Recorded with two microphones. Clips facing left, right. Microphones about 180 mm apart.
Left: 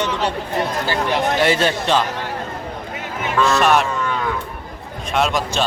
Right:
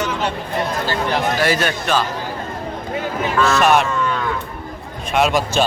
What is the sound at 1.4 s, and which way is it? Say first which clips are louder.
Speech: left 2 dB; 25° left (ahead or behind).